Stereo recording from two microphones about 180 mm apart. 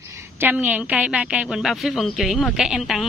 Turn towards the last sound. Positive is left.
turn(degrees=0)  # may be behind; listen again after turning